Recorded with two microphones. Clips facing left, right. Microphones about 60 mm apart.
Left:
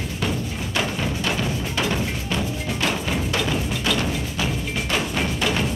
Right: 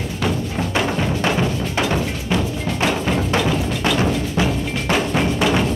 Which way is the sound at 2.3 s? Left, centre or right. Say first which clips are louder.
Right 5 dB; centre.